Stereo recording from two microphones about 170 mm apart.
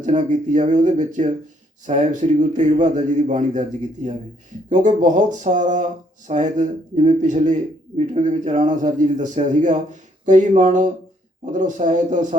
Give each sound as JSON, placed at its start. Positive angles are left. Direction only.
{"t": 0.0, "sound": "a man's voice", "side_deg": -45}